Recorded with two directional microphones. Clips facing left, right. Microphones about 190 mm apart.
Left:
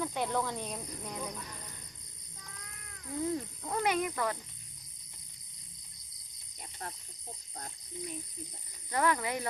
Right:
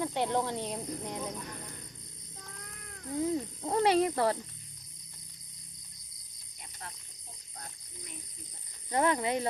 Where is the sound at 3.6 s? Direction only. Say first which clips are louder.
Right 6 dB; 30° right (ahead or behind).